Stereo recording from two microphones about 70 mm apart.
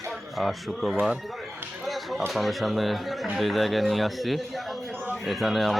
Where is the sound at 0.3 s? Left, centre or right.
Centre.